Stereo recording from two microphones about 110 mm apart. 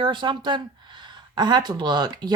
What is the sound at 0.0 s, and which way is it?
Speech, 45° right (ahead or behind).